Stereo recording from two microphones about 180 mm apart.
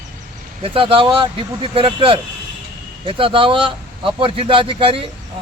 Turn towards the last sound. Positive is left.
turn(degrees=-30)  # may be behind; listen again after turning